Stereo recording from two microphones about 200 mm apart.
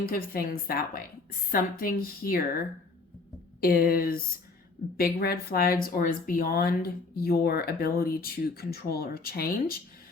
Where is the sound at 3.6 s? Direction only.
50° left (ahead or behind).